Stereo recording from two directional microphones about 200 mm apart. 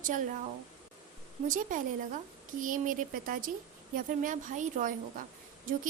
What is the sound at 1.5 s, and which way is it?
A woman's voice, 40° right (ahead or behind).